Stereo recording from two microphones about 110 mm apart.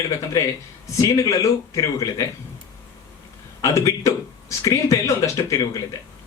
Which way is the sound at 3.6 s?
30° left (ahead or behind).